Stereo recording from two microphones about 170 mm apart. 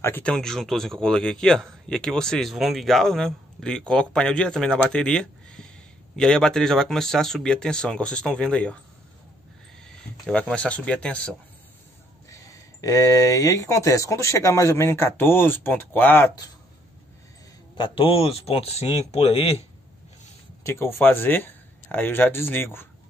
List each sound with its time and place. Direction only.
0.0 s speech: 10° left (ahead or behind)
9.8 s speech: 5° left (ahead or behind)
12.3 s speech: 20° left (ahead or behind)
17.7 s speech: 30° left (ahead or behind)
20.6 s speech: 15° left (ahead or behind)